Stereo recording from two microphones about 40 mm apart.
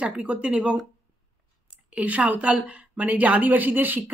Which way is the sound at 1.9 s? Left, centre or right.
Right.